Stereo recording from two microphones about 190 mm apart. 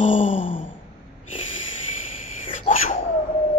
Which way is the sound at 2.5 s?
40° left (ahead or behind).